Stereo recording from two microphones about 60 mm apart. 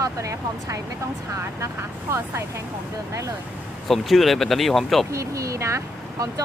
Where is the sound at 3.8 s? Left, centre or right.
Centre.